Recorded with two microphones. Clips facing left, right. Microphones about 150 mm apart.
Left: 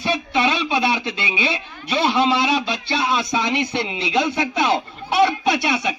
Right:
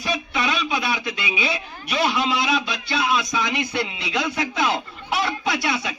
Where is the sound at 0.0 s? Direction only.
30° left (ahead or behind).